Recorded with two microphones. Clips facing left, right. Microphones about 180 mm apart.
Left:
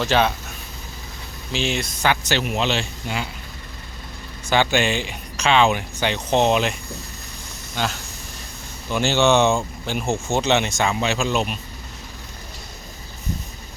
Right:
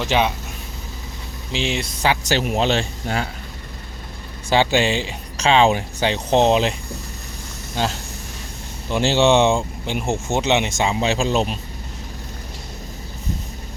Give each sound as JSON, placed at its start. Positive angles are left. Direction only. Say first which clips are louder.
{"t": 0.0, "sound": "speech", "louder": "even", "side_deg": -15}
{"t": 1.5, "sound": "speech", "louder": "even", "side_deg": -30}
{"t": 4.4, "sound": "speech", "louder": "right 2 dB", "side_deg": -30}
{"t": 7.8, "sound": "speech", "louder": "right 2 dB", "side_deg": -35}
{"t": 11.1, "sound": "speech", "louder": "right 2 dB", "side_deg": -35}